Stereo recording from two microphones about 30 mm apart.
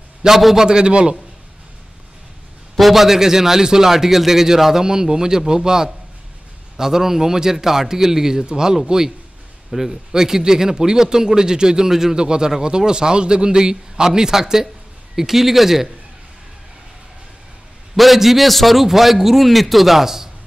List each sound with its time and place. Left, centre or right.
0.2 s a man's voice: right
2.7 s a man's voice: centre
17.9 s a man's voice: centre